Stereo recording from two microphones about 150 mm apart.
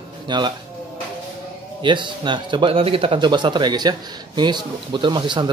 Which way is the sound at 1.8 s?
30° right (ahead or behind).